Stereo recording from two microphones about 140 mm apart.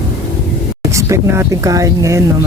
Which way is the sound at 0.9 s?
20° right (ahead or behind).